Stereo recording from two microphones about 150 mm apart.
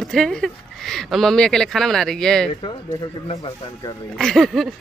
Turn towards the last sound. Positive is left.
turn(degrees=0)  # may be behind; listen again after turning